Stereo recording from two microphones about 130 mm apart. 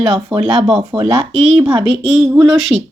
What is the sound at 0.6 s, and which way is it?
Speech, 5° right (ahead or behind).